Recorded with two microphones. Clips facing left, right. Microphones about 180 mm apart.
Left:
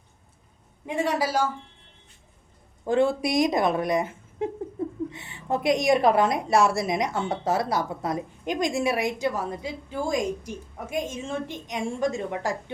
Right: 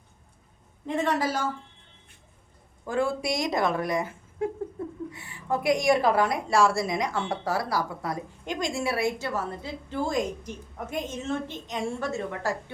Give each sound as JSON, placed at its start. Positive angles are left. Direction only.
{"t": 0.9, "sound": "a woman's voice", "side_deg": 10}
{"t": 2.8, "sound": "a woman's voice", "side_deg": 25}
{"t": 4.8, "sound": "a sound", "side_deg": 20}
{"t": 5.1, "sound": "a woman's voice", "side_deg": 25}